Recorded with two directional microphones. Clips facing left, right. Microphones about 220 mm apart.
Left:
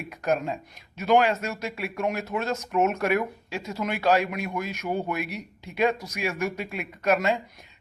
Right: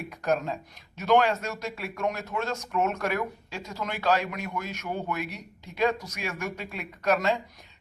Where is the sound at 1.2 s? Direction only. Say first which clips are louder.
Left 2 dB; 15° left (ahead or behind).